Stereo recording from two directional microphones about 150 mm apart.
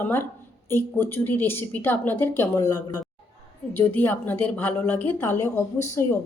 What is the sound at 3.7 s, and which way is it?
A woman's voice, 10° left (ahead or behind).